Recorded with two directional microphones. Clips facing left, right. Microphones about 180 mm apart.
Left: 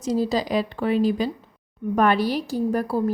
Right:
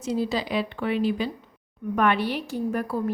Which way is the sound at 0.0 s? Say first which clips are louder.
Left 4 dB; 40° left (ahead or behind).